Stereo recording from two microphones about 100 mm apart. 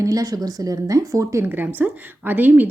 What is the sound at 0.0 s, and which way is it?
A woman's voice, 35° right (ahead or behind).